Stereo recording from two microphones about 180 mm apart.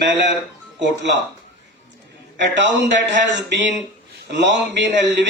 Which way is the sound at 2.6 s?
80° right.